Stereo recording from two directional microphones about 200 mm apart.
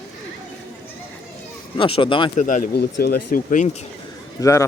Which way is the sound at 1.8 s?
25° left (ahead or behind).